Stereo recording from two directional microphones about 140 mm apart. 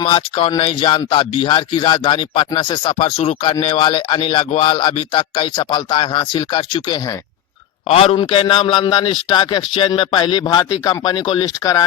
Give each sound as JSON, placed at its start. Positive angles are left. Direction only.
{"t": 0.0, "sound": "speech", "side_deg": 40}